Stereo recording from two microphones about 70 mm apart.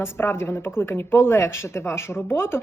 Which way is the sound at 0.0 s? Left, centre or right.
Left.